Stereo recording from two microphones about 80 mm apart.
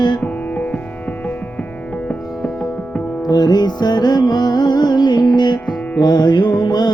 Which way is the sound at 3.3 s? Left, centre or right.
Left.